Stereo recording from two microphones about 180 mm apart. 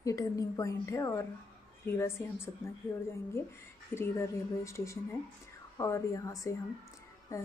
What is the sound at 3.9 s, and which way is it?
Speech, 15° left (ahead or behind).